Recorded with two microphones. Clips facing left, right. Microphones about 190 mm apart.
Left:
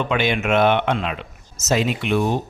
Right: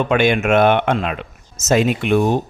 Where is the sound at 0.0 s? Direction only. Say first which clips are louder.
Right 5 dB; 50° right (ahead or behind).